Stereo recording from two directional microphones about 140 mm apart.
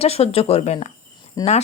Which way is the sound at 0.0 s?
45° left (ahead or behind).